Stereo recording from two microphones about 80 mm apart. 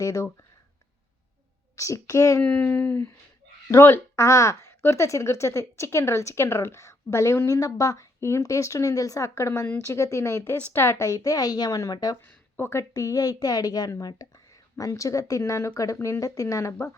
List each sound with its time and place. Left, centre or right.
0.0 s speech: left
1.7 s a woman's voice: left
2.4 s a woman's voice: centre; by 9.3 s left
9.3 s a woman's voice: left
10.5 s speech: left
10.8 s speech: left
12.5 s a woman's voice: left
12.9 s speech: left
14.8 s speech: left